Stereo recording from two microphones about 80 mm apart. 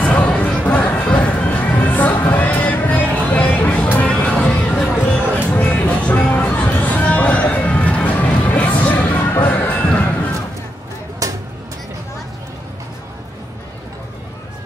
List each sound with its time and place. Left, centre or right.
0.0 s music: centre
11.2 s music: right